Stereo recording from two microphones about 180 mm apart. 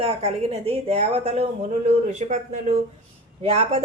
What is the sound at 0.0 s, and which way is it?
Speech, 35° right (ahead or behind).